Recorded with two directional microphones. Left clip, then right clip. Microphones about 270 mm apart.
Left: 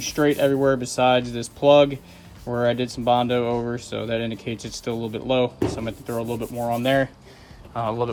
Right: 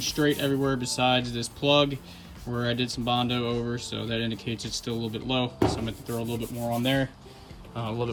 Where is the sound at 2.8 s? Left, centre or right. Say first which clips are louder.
Left 4 dB; centre.